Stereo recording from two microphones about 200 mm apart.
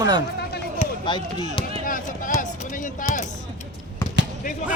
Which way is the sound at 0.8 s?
20° left (ahead or behind).